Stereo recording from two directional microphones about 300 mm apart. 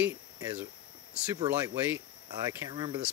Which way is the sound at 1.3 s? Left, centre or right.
Centre.